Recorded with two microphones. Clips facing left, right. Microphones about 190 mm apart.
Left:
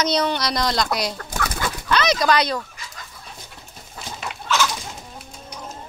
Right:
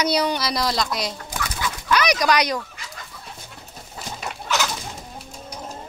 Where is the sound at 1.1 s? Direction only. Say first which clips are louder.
Left 3 dB; 60° left (ahead or behind).